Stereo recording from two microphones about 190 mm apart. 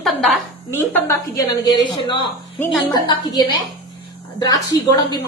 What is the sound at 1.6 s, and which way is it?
A woman's voice, 25° left (ahead or behind).